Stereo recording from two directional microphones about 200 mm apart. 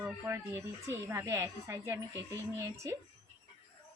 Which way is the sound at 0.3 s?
15° right (ahead or behind).